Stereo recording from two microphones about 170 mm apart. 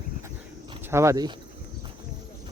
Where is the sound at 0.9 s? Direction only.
15° right (ahead or behind).